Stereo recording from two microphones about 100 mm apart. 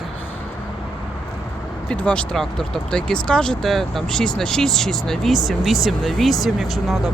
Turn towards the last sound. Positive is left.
turn(degrees=0)  # may be behind; listen again after turning